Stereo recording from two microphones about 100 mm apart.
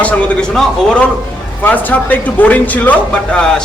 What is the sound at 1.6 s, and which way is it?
A man's voice, 20° left (ahead or behind).